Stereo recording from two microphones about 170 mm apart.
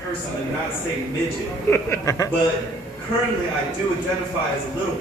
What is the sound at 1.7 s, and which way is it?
Speech, 20° left (ahead or behind).